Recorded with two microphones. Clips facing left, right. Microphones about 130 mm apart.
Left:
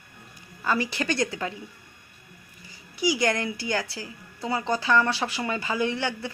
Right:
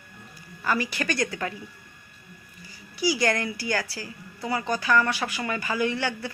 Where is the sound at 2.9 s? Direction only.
20° left (ahead or behind).